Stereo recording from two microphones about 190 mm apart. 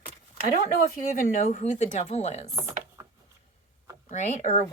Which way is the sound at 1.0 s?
45° left (ahead or behind).